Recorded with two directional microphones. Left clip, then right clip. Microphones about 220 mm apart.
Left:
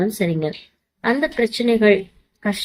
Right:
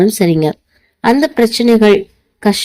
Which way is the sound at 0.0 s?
40° right (ahead or behind).